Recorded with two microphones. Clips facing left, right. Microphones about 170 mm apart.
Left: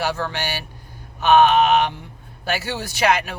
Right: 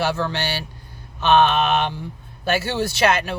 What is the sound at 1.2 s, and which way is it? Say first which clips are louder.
Speech: left 2 dB; 15° left (ahead or behind).